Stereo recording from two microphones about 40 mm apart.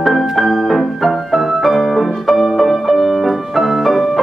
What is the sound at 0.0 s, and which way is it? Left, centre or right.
Music, centre.